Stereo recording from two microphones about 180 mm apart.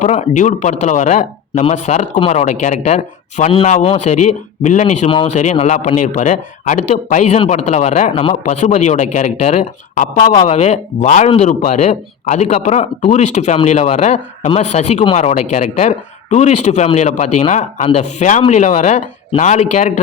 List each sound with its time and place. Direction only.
0.0 s speech: 40° left (ahead or behind)